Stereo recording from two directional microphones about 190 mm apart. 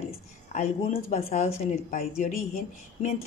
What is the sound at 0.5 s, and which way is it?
A woman's voice, 40° left (ahead or behind).